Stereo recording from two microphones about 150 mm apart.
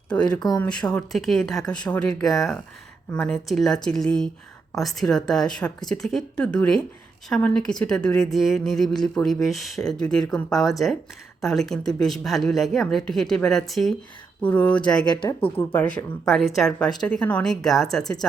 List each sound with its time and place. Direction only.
0.3 s speech: 25° left (ahead or behind)
0.6 s a woman's voice: 5° left (ahead or behind)
15.4 s speech: 40° left (ahead or behind)
15.7 s speech: 15° left (ahead or behind)
16.3 s a woman's voice: centre (ahead or behind)